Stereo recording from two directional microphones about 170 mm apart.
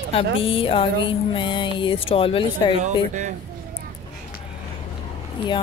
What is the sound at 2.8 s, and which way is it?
Speech, 45° right (ahead or behind).